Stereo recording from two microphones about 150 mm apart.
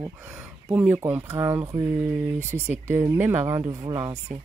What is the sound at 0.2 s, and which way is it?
Speech, 10° right (ahead or behind).